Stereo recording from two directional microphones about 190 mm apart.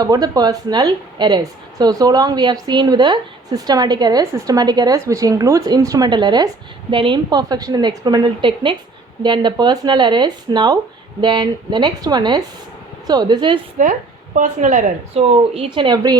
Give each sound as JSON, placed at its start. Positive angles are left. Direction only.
{"t": 0.0, "sound": "a woman's voice", "side_deg": -20}
{"t": 13.8, "sound": "speech", "side_deg": -40}